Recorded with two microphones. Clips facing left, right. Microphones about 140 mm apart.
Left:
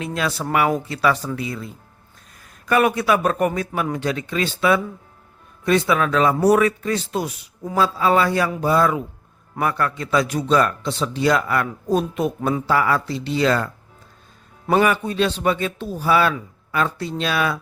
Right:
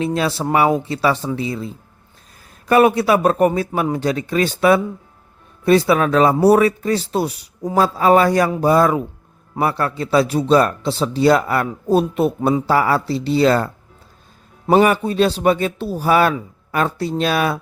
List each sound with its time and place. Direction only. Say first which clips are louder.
0.0 s speech: right 5 dB; 30° right (ahead or behind)
14.7 s speech: right 4 dB; 35° right (ahead or behind)